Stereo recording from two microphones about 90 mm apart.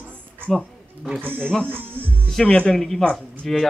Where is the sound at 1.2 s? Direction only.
10° left (ahead or behind).